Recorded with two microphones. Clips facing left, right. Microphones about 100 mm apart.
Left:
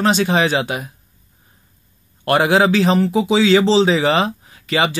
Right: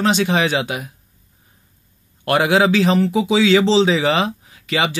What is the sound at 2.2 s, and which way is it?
Speech, 35° left (ahead or behind).